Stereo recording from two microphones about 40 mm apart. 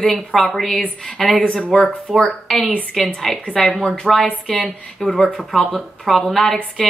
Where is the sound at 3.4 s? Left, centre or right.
Centre.